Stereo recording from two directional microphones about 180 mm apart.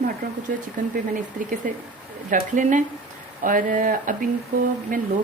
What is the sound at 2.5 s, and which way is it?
A woman's voice, 45° right (ahead or behind).